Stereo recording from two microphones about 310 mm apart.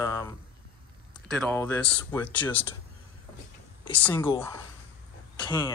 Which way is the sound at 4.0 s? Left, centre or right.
Centre.